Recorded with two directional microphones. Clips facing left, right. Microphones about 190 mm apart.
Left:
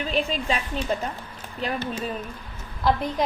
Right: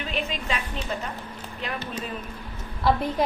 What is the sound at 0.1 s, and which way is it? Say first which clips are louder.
Speech: left 4 dB; 35° left (ahead or behind).